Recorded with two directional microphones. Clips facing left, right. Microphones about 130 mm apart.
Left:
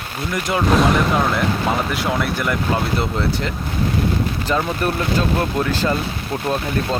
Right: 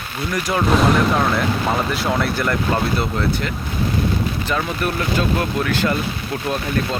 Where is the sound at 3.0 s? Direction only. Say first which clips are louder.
Even; 30° left (ahead or behind).